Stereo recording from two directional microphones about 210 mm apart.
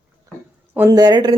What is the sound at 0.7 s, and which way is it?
Speech, 15° right (ahead or behind).